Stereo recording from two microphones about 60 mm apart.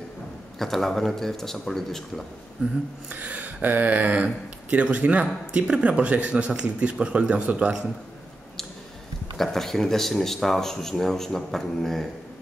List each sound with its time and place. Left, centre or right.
0.6 s speech: centre
2.6 s speech: centre
9.4 s speech: centre